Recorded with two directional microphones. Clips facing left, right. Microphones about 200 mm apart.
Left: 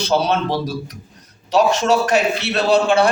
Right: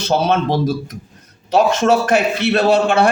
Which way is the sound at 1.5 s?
50° right (ahead or behind).